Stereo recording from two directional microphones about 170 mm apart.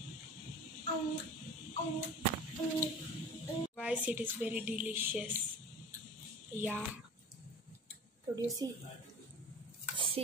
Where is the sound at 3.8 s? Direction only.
10° right (ahead or behind).